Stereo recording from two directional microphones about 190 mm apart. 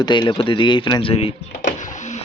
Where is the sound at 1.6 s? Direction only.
40° left (ahead or behind).